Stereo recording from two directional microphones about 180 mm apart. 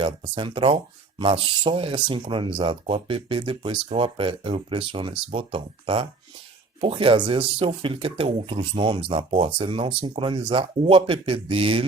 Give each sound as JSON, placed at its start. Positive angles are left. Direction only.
{"t": 0.0, "sound": "speech", "side_deg": -30}